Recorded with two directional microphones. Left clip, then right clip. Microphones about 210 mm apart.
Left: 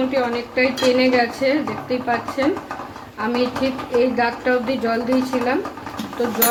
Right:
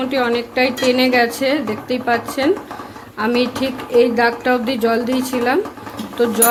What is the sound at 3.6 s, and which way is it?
A woman's voice, 55° right (ahead or behind).